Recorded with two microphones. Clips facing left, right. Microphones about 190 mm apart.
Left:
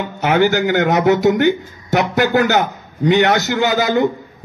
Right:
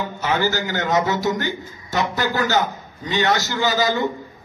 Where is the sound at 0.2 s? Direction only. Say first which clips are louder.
Left 8 dB; 70° left (ahead or behind).